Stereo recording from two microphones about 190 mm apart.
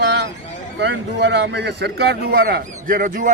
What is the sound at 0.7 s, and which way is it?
A man's voice, 65° right (ahead or behind).